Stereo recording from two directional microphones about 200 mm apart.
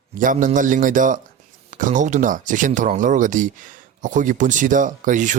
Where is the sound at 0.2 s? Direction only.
40° right (ahead or behind).